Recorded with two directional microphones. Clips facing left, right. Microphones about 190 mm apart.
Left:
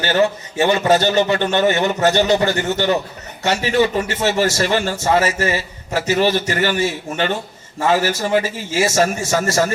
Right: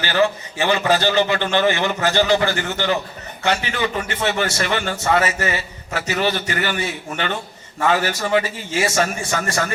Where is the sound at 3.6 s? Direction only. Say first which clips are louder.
Left 7 dB; 35° left (ahead or behind).